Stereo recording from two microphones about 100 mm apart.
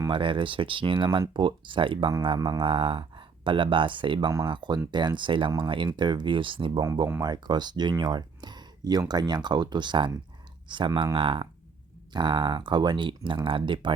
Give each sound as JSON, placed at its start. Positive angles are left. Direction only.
{"t": 0.1, "sound": "speech", "side_deg": -60}
{"t": 7.2, "sound": "speech", "side_deg": -45}